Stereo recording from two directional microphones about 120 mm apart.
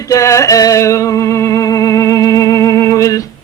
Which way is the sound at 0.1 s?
25° left (ahead or behind).